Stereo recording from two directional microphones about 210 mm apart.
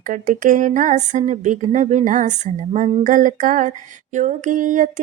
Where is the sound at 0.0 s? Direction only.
40° right (ahead or behind).